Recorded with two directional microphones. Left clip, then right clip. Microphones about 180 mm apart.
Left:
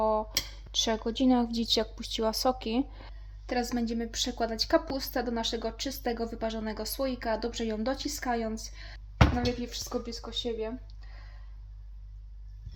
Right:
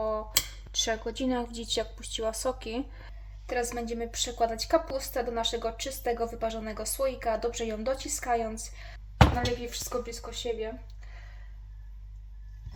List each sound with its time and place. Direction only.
0.0 s a sound: 25° left (ahead or behind)
0.7 s a woman's voice: 25° left (ahead or behind)
3.4 s a woman's voice: 40° left (ahead or behind)
9.6 s speech: 25° left (ahead or behind)